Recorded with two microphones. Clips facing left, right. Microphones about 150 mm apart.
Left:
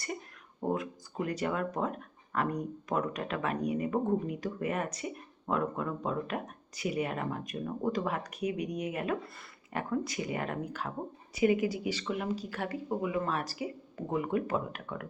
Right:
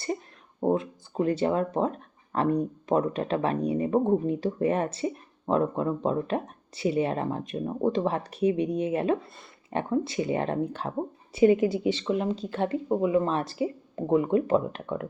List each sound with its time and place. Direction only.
0.6 s speech: 25° right (ahead or behind)